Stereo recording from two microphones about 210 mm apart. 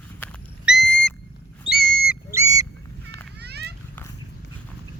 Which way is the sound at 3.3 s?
50° right (ahead or behind).